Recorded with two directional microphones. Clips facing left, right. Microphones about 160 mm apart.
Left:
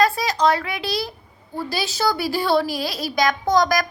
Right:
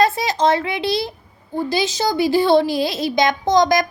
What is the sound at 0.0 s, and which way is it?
A child's voice, 25° right (ahead or behind).